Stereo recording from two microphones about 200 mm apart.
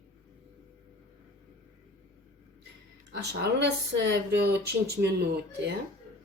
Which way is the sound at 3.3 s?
60° right (ahead or behind).